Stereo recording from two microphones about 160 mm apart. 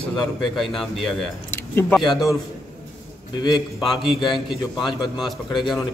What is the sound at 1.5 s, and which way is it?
Speech, 15° left (ahead or behind).